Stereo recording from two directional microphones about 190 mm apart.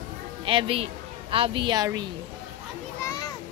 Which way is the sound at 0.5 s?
25° right (ahead or behind).